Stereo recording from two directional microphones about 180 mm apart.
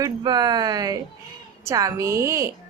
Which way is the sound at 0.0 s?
20° right (ahead or behind).